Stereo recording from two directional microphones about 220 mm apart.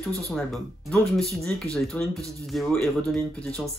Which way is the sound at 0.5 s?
Centre (ahead or behind).